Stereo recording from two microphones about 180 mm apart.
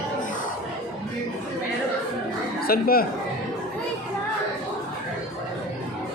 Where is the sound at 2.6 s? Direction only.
55° left (ahead or behind).